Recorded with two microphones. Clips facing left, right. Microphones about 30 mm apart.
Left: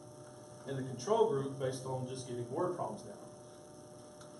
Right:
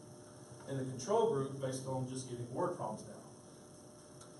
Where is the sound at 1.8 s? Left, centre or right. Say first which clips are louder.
Even; centre.